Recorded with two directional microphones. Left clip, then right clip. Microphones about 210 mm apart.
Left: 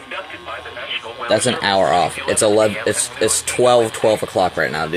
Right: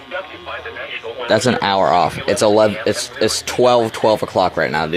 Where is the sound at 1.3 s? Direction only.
25° right (ahead or behind).